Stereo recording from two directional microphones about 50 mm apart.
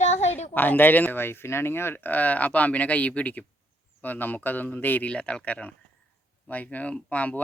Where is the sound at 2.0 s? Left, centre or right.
Left.